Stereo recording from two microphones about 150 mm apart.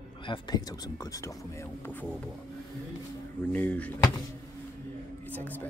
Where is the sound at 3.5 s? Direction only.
10° left (ahead or behind).